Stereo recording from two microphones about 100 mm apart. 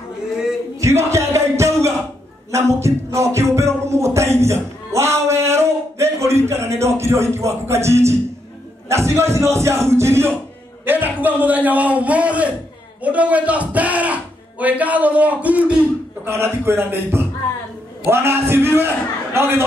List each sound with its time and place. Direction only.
0.7 s music: 30° right (ahead or behind)
8.8 s a man's voice: 30° right (ahead or behind)
16.3 s a man's voice: 25° right (ahead or behind)